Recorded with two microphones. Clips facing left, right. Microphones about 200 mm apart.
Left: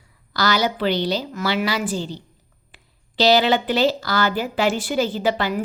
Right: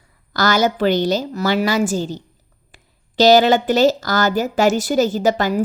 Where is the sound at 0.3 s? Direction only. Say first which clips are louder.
Right 4 dB; 50° right (ahead or behind).